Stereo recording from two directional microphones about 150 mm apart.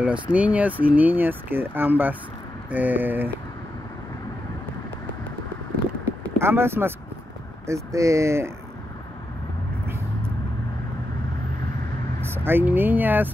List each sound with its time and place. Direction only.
0.0 s speech: 10° right (ahead or behind)
6.4 s speech: 15° right (ahead or behind)
12.3 s speech: 15° right (ahead or behind)